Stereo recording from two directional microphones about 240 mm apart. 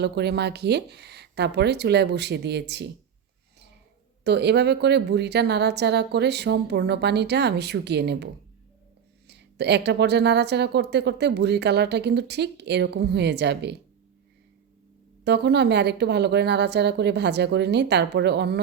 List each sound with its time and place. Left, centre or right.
0.0 s a woman's voice: right
4.2 s a woman's voice: right
15.2 s a woman's voice: right